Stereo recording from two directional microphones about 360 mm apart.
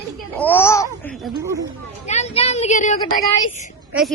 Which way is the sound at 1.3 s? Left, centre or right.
Centre.